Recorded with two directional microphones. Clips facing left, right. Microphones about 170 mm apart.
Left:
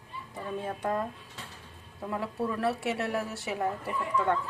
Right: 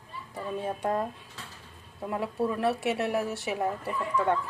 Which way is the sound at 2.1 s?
20° right (ahead or behind).